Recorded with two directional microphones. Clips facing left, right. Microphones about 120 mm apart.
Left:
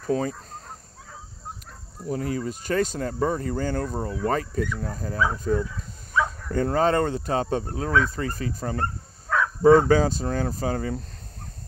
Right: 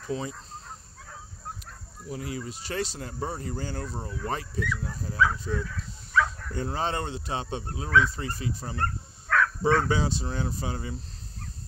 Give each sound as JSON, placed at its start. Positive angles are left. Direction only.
{"t": 0.0, "sound": "fowl", "side_deg": 45}
{"t": 2.0, "sound": "speech", "side_deg": 45}
{"t": 5.6, "sound": "dog", "side_deg": 20}
{"t": 6.5, "sound": "speech", "side_deg": 50}
{"t": 8.8, "sound": "dog", "side_deg": 20}
{"t": 9.6, "sound": "speech", "side_deg": 40}